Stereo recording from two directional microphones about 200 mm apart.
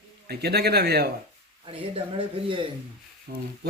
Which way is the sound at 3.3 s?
50° right (ahead or behind).